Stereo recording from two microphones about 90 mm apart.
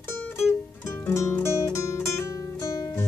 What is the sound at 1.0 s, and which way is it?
Music, 35° left (ahead or behind).